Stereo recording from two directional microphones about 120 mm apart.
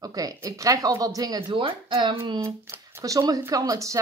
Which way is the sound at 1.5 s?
45° right (ahead or behind).